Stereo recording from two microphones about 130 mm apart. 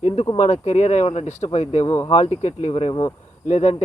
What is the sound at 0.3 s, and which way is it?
Speech, 65° left (ahead or behind).